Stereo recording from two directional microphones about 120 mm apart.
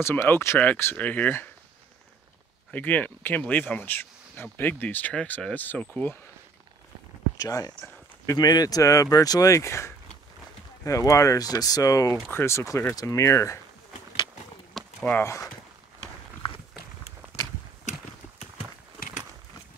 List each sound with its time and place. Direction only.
0.0 s speech: 20° left (ahead or behind)
2.7 s speech: 15° left (ahead or behind)
7.3 s speech: 30° left (ahead or behind)
14.8 s walk: centre (ahead or behind)